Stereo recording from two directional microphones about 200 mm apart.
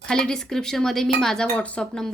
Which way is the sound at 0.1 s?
5° left (ahead or behind).